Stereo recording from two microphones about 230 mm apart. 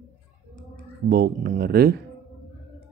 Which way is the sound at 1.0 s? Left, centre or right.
Right.